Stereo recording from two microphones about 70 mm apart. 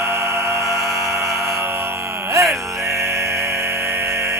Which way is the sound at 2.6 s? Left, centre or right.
Right.